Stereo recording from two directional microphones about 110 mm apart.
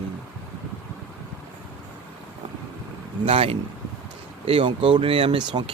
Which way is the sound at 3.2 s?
60° right (ahead or behind).